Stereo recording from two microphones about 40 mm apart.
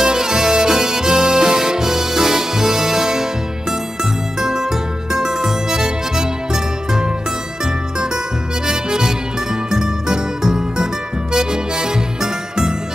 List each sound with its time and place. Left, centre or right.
0.0 s music: centre
8.6 s music: centre